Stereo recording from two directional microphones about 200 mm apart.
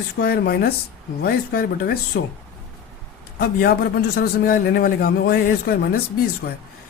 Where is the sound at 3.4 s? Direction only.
50° left (ahead or behind).